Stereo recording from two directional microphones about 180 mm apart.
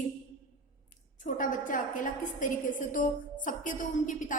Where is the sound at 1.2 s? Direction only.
50° left (ahead or behind).